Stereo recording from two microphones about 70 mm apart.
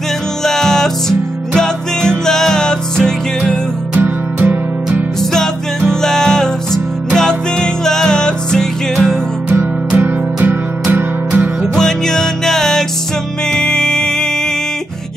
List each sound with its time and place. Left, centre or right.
0.4 s music: centre
4.4 s music: right
5.2 s music: centre
9.9 s music: right
11.7 s music: centre